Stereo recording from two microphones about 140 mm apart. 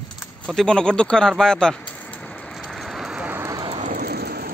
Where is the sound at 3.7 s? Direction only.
65° right (ahead or behind); by 4.5 s 90° right.